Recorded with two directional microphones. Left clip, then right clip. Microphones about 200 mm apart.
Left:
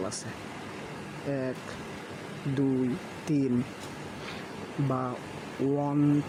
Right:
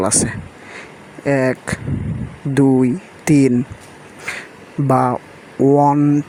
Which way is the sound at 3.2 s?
50° right (ahead or behind).